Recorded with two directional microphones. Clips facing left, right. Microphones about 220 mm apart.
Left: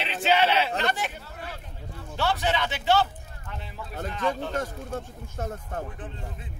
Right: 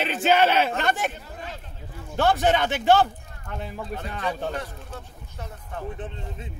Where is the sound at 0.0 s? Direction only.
50° right (ahead or behind).